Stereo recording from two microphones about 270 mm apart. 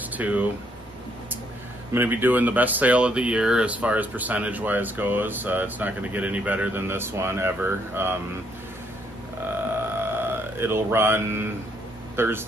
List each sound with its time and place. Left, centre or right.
0.1 s speech: centre
2.0 s speech: centre
9.9 s mantra: centre
12.2 s speech: centre